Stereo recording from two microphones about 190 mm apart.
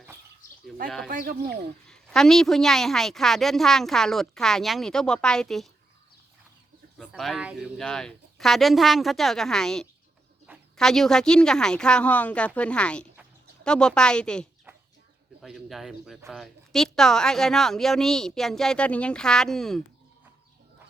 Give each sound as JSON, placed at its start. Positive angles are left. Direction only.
{"t": 1.0, "sound": "speech", "side_deg": -50}
{"t": 1.9, "sound": "a woman's voice", "side_deg": 5}
{"t": 7.1, "sound": "a woman's voice", "side_deg": 0}